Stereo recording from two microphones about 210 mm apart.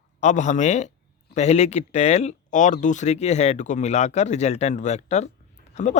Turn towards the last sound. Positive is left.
turn(degrees=30)  # may be behind; listen again after turning